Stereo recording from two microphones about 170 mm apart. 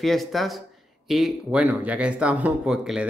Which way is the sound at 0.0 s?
Centre (ahead or behind).